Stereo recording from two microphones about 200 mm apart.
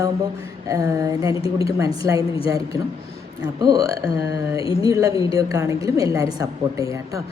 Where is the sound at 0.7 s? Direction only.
15° right (ahead or behind).